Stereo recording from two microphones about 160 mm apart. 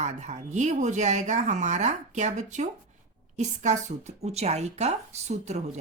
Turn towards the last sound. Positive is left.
turn(degrees=-45)  # may be behind; listen again after turning